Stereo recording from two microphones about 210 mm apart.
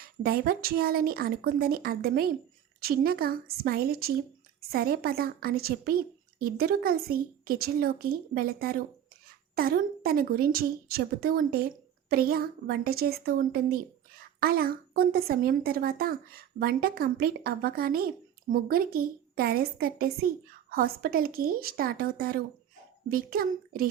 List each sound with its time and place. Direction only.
0.0 s a woman's voice: 45° right (ahead or behind)